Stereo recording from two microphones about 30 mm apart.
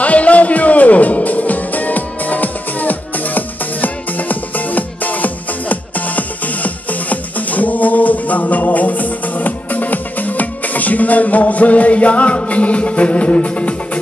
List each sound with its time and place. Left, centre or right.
0.0 s music: left